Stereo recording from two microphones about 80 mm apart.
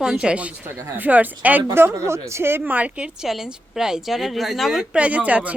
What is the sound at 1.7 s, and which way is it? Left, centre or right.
A woman's voice, right.